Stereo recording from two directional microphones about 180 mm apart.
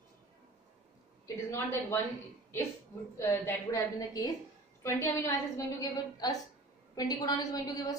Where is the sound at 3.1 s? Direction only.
15° left (ahead or behind).